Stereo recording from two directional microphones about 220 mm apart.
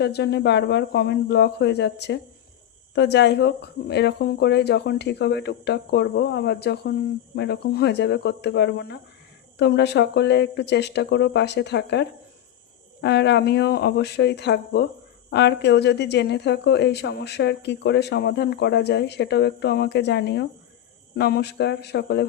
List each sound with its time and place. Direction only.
0.0 s speech: 50° left (ahead or behind)